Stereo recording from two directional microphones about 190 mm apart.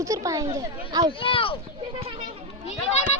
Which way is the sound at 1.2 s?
25° left (ahead or behind).